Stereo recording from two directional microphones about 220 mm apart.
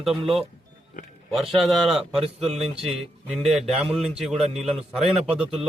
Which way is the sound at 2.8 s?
Centre (ahead or behind).